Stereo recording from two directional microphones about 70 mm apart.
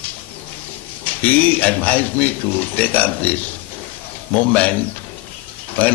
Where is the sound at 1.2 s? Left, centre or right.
Left.